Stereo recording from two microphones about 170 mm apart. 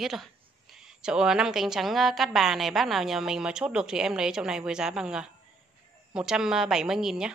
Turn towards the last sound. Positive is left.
turn(degrees=-5)  # may be behind; listen again after turning